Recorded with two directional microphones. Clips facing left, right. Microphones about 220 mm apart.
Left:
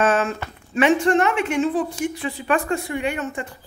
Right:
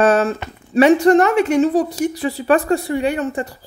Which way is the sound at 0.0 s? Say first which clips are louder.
Right 5 dB; 40° right (ahead or behind).